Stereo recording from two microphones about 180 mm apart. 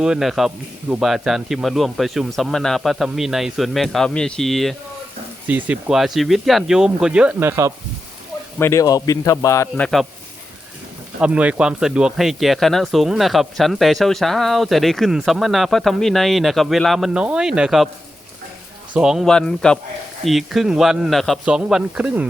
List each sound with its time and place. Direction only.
0.0 s speech: 5° right (ahead or behind)
8.5 s speech: 15° left (ahead or behind)
9.8 s speech: centre (ahead or behind)
11.2 s speech: 5° right (ahead or behind)
18.9 s speech: 5° right (ahead or behind)